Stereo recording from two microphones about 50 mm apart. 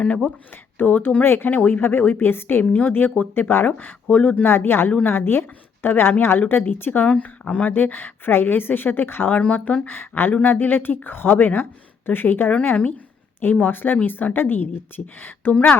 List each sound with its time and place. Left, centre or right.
0.8 s speech: left
1.2 s speech: left
1.5 s speech: left
7.2 s speech: left
9.3 s speech: left
9.8 s speech: left